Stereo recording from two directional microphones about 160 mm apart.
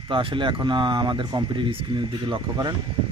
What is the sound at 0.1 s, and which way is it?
Speech, 30° right (ahead or behind).